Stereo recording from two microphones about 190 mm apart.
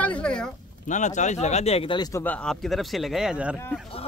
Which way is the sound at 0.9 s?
40° left (ahead or behind).